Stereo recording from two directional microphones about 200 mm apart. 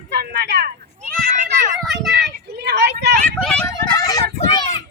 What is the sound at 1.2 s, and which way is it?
Children playing, 40° right (ahead or behind).